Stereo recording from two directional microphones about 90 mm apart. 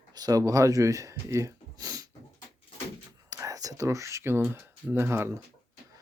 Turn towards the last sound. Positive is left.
turn(degrees=-25)  # may be behind; listen again after turning